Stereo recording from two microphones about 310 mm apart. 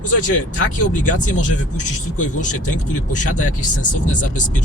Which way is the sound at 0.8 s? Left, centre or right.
Left.